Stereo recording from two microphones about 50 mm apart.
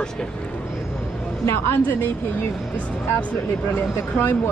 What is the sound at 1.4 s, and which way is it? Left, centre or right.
Speech, left.